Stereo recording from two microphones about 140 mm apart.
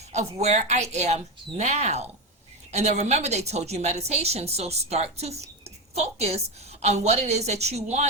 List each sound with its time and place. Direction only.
0.1 s a woman's voice: 50° right (ahead or behind)